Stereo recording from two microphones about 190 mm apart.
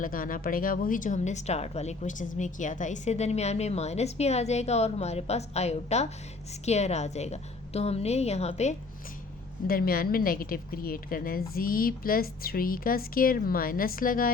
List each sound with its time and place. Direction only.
0.0 s a woman's voice: 45° left (ahead or behind)
9.6 s a woman's voice: 50° left (ahead or behind)